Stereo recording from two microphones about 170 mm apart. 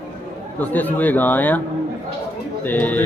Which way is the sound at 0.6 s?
10° left (ahead or behind).